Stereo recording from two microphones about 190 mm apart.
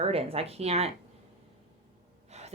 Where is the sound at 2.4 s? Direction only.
35° right (ahead or behind).